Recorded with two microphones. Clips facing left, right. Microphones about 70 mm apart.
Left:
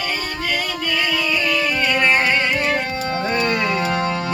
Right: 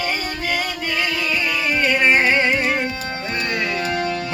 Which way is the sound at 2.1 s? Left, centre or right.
Right.